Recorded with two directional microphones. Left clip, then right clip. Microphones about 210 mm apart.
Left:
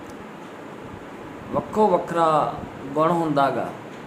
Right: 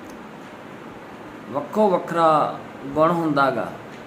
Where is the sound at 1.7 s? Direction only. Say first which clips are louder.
Even; 5° right (ahead or behind).